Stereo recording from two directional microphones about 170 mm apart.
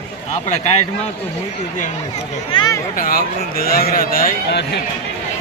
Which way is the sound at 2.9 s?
55° left (ahead or behind).